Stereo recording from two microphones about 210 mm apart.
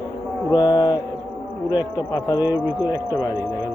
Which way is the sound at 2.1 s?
20° left (ahead or behind).